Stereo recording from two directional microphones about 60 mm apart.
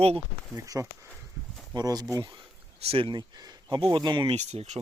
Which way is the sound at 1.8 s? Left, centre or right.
Right.